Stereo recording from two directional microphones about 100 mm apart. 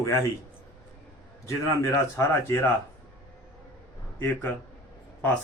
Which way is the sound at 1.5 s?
25° left (ahead or behind).